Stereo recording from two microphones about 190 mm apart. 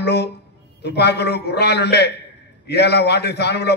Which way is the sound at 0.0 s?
60° left (ahead or behind).